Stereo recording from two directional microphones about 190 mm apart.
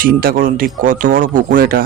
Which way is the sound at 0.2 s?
50° right (ahead or behind).